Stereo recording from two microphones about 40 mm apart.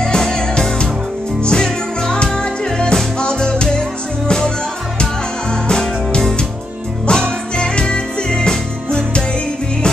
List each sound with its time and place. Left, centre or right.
0.0 s music: centre
5.7 s music: centre